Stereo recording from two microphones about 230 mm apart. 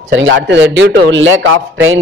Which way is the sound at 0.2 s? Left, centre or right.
Right.